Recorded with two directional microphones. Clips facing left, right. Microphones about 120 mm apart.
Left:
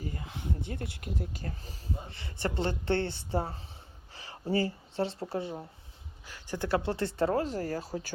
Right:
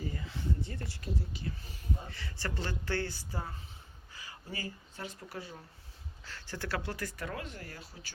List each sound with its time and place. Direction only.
0.2 s speech: 60° left (ahead or behind); by 1.8 s 40° left (ahead or behind)
2.0 s speech: 25° left (ahead or behind)
6.2 s speech: 15° left (ahead or behind); by 7.9 s 40° left (ahead or behind)